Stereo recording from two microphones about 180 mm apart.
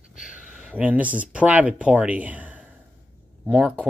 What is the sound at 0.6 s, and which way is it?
Speech, 5° right (ahead or behind).